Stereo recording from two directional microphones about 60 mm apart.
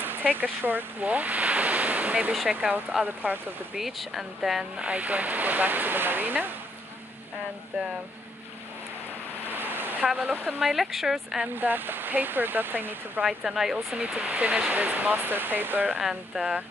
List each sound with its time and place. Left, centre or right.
0.0 s speech: right
1.0 s a sound: right
2.9 s speech: centre
4.8 s speech: right
9.5 s a sound: right
10.1 s speech: right
10.6 s speech: centre
11.4 s speech: right
13.2 s speech: centre
13.9 s speech: right
16.0 s speech: centre